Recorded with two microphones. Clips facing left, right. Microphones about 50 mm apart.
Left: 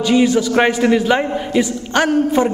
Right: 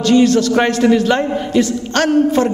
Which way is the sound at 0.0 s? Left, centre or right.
Centre.